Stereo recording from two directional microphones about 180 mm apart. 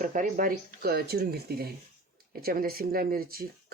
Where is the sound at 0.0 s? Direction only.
45° right (ahead or behind).